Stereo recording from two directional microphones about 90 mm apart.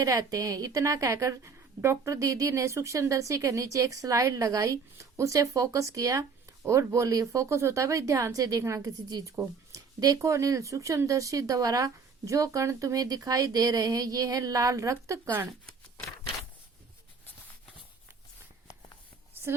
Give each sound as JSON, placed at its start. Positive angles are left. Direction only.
{"t": 0.0, "sound": "a woman's voice", "side_deg": -40}